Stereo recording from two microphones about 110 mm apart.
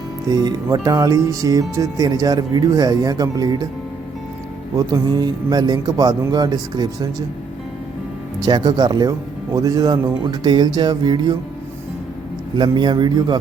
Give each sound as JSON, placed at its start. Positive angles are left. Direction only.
{"t": 0.3, "sound": "speech", "side_deg": -35}
{"t": 4.7, "sound": "speech", "side_deg": -35}
{"t": 8.4, "sound": "speech", "side_deg": -40}
{"t": 12.5, "sound": "a man's voice", "side_deg": -40}